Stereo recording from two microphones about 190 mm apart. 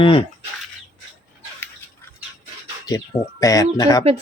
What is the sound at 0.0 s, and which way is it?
Speech, 30° left (ahead or behind).